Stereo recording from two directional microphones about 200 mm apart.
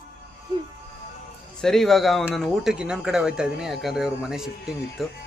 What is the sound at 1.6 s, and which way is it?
Speech, centre (ahead or behind).